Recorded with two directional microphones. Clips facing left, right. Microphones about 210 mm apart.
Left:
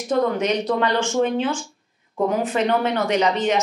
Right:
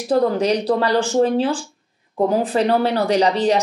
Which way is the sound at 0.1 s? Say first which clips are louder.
Right 3 dB; 35° right (ahead or behind).